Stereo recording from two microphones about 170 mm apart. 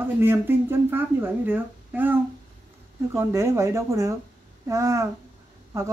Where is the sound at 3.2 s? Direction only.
15° right (ahead or behind).